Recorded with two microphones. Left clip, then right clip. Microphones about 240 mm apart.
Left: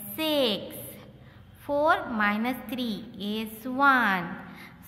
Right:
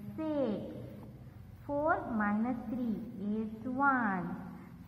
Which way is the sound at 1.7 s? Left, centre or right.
Left.